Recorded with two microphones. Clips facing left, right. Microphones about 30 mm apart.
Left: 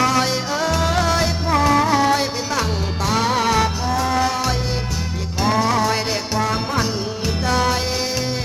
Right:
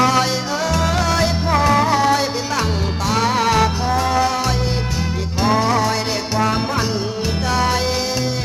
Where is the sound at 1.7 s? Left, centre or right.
Right.